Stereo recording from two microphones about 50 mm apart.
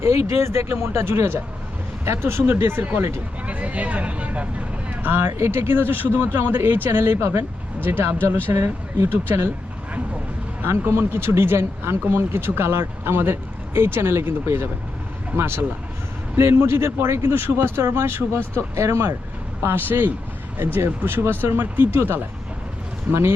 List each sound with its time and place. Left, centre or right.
0.0 s speech: right
3.4 s speech: right
5.1 s speech: right
7.2 s speech: right
7.9 s speech: right
8.5 s speech: right
10.7 s speech: right
17.3 s speech: right
18.8 s speech: right
19.6 s speech: right
23.1 s speech: right